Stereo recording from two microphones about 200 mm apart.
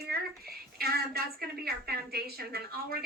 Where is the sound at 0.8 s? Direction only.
50° right (ahead or behind).